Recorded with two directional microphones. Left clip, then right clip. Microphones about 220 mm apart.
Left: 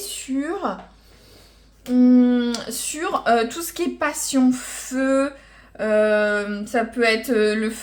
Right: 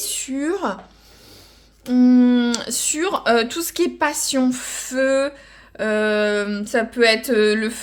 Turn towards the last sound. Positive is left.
turn(degrees=-40)  # may be behind; listen again after turning